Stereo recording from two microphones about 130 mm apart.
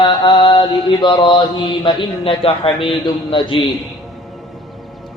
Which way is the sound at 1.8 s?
45° left (ahead or behind).